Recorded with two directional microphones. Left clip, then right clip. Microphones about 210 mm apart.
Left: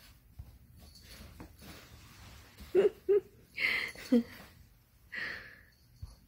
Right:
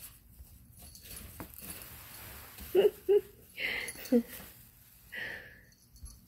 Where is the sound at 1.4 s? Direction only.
50° right (ahead or behind).